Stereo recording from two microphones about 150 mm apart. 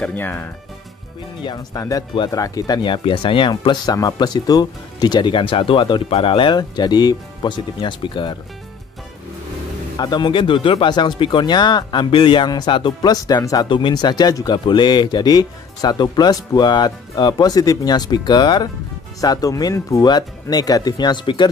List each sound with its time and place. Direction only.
0.0 s speech: 10° left (ahead or behind)
1.4 s speech: 25° left (ahead or behind)
9.9 s speech: 30° left (ahead or behind)